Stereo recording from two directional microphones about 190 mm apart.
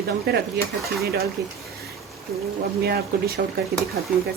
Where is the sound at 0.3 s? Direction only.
55° right (ahead or behind).